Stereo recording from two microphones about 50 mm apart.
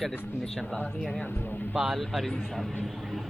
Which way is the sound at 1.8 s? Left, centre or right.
Centre.